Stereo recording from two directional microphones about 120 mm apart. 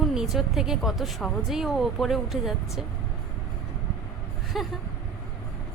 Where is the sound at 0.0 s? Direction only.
5° right (ahead or behind).